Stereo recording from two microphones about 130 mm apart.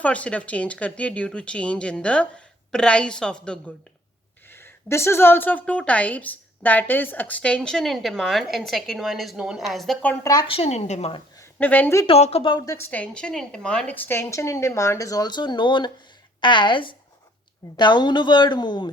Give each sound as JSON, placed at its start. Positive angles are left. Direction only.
{"t": 0.0, "sound": "a woman's voice", "side_deg": 10}
{"t": 4.5, "sound": "a woman's voice", "side_deg": 20}
{"t": 10.4, "sound": "a woman's voice", "side_deg": 50}
{"t": 11.6, "sound": "a woman's voice", "side_deg": 15}
{"t": 12.0, "sound": "a woman's voice", "side_deg": 50}
{"t": 12.6, "sound": "a woman's voice", "side_deg": 20}